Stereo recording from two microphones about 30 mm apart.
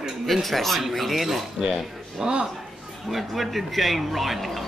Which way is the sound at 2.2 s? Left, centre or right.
Right.